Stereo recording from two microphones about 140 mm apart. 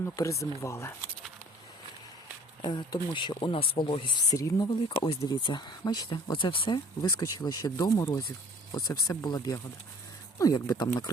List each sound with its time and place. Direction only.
0.0 s speech: 20° left (ahead or behind)
2.6 s speech: 30° left (ahead or behind)